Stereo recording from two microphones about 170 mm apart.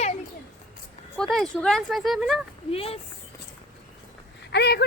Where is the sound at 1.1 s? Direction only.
Centre (ahead or behind).